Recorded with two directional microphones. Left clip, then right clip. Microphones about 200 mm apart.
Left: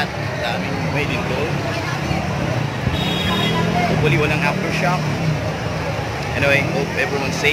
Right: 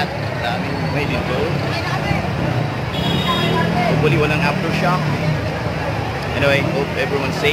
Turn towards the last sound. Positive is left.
turn(degrees=0)  # may be behind; listen again after turning